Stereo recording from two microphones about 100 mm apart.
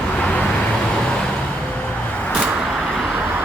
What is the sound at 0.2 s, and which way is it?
Vehicle, 15° left (ahead or behind).